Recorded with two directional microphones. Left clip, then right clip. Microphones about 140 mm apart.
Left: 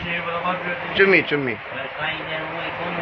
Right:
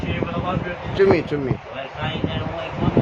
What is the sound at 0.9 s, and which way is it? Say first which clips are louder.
Speech: left 1 dB; 35° right (ahead or behind).